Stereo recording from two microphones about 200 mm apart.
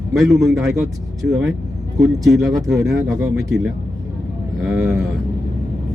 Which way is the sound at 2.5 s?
15° right (ahead or behind).